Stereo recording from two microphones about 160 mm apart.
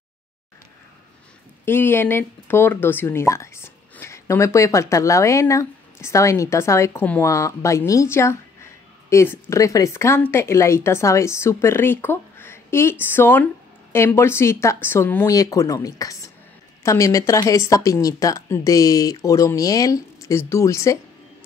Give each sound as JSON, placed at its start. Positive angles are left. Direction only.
{"t": 1.7, "sound": "speech", "side_deg": 15}